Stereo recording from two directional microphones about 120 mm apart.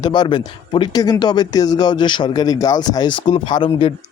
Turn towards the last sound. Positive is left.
turn(degrees=45)  # may be behind; listen again after turning